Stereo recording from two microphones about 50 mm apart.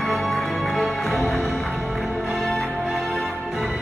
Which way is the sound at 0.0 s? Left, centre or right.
Centre.